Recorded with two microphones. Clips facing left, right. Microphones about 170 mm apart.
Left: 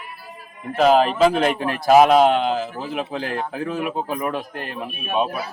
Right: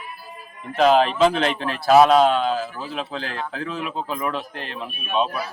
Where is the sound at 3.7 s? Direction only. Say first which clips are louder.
Left 3 dB; 50° left (ahead or behind).